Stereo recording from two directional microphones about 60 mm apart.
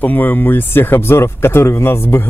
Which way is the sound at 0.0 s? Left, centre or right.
Left.